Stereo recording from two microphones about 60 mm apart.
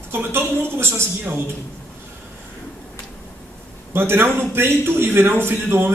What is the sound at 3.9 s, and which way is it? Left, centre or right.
A man's voice, right.